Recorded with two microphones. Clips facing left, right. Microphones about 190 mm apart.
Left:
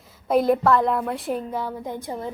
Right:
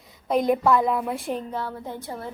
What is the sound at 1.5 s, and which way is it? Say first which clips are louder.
Speech: left 3 dB; 10° left (ahead or behind).